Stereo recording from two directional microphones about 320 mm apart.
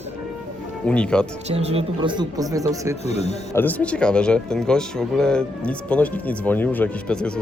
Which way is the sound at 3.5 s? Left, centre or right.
Centre.